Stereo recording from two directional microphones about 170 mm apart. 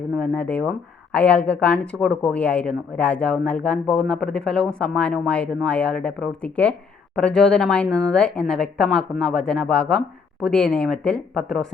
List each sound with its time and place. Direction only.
0.2 s speech: 10° left (ahead or behind)